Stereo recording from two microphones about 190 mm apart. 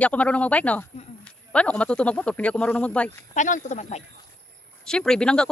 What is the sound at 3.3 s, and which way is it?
Speech, 40° left (ahead or behind).